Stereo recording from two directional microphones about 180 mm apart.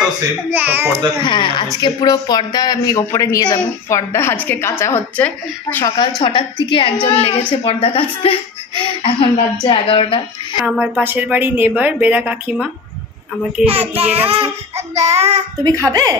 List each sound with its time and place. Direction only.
0.0 s speech: 10° right (ahead or behind)
1.2 s speech: 25° left (ahead or behind); by 5.9 s 10° left (ahead or behind)
5.9 s a woman's voice: 25° left (ahead or behind)
10.7 s speech: 5° right (ahead or behind)
13.7 s a child's voice: 35° right (ahead or behind)
15.6 s speech: 20° right (ahead or behind)